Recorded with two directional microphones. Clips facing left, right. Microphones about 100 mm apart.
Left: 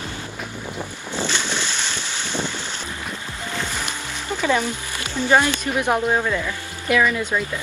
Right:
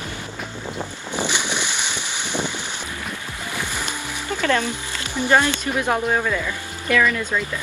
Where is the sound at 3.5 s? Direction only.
15° right (ahead or behind).